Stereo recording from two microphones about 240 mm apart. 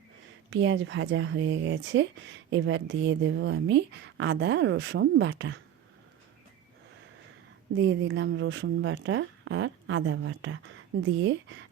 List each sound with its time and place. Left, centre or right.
0.5 s speech: right
7.8 s speech: right